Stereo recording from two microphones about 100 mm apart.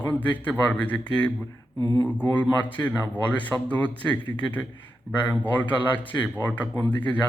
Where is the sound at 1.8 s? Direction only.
30° left (ahead or behind).